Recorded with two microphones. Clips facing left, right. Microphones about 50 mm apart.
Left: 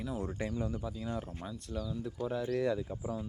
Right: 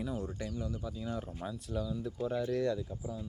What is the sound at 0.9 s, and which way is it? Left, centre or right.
Speech, centre.